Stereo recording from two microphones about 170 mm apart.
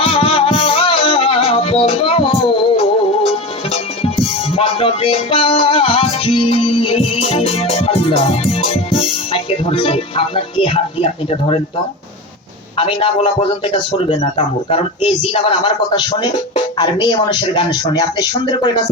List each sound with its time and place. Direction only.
0.0 s music: 35° left (ahead or behind)
12.7 s a man's voice: 35° left (ahead or behind)